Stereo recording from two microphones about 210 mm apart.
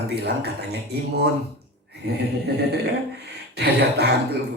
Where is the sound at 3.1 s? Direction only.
50° right (ahead or behind).